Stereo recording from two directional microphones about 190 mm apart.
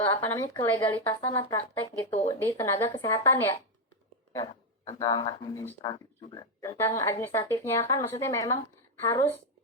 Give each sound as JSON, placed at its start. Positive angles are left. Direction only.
{"t": 0.1, "sound": "speech", "side_deg": 15}
{"t": 4.9, "sound": "speech", "side_deg": 20}